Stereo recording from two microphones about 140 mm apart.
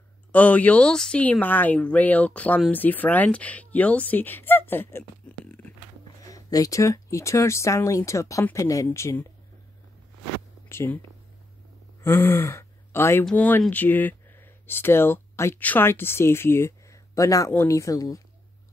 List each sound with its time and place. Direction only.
0.3 s speech: 10° left (ahead or behind)
6.2 s speech: 25° left (ahead or behind)
10.7 s speech: 20° left (ahead or behind)
12.0 s speech: 15° left (ahead or behind)